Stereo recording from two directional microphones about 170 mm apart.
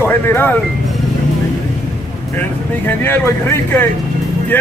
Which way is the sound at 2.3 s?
10° left (ahead or behind).